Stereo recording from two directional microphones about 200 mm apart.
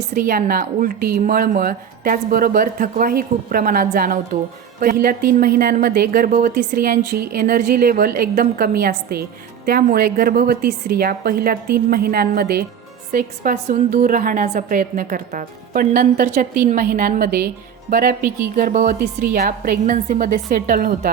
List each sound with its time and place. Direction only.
0.1 s a woman's voice: 45° right (ahead or behind)